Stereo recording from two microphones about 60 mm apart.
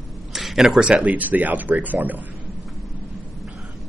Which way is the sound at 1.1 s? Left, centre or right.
Right.